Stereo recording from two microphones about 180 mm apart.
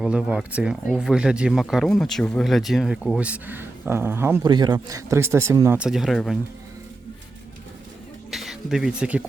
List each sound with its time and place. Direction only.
0.0 s speech: 5° right (ahead or behind)
4.5 s speech: 25° right (ahead or behind); by 6.4 s centre (ahead or behind)
8.3 s speech: centre (ahead or behind)